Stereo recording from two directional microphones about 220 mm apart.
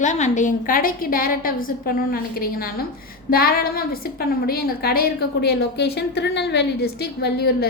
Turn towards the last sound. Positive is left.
turn(degrees=45)  # may be behind; listen again after turning